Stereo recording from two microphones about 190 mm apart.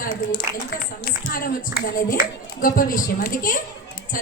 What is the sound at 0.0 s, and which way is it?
Speech, 50° left (ahead or behind).